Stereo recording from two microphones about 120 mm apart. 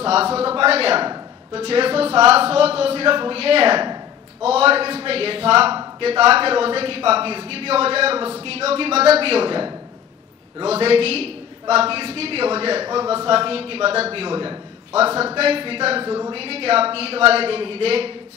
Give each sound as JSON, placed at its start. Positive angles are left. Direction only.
{"t": 0.0, "sound": "a man's voice", "side_deg": -55}
{"t": 10.6, "sound": "a woman's voice", "side_deg": -55}
{"t": 16.1, "sound": "speech", "side_deg": -35}
{"t": 16.3, "sound": "a man's voice", "side_deg": -55}